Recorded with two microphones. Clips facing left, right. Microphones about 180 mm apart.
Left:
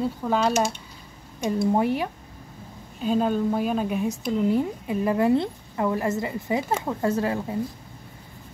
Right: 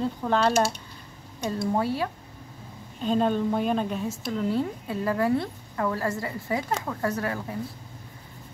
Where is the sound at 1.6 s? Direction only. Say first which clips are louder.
Left 3 dB; 20° left (ahead or behind).